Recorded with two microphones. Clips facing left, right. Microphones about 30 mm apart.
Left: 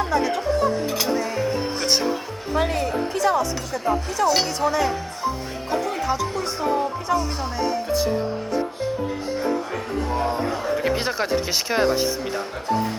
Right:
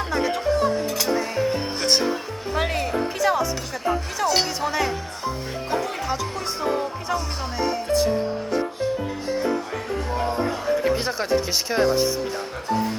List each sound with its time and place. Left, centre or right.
0.0 s speech: centre
0.9 s speech: centre
1.1 s speech: centre
3.8 s speech: centre
4.4 s speech: centre
11.0 s speech: centre